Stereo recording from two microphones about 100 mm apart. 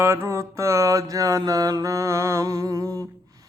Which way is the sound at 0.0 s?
25° right (ahead or behind).